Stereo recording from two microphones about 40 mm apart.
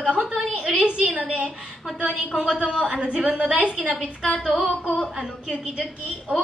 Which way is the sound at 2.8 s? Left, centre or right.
Centre.